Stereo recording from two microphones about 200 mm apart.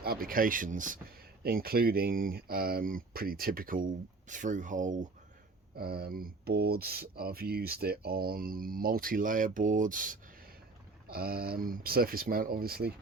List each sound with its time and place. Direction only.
0.0 s speech: 50° right (ahead or behind)
5.7 s speech: 50° right (ahead or behind)